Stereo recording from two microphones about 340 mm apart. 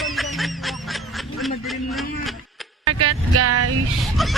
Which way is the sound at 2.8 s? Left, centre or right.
Right.